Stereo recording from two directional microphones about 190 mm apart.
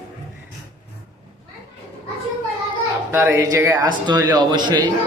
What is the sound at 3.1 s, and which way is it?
A man's voice, 15° right (ahead or behind).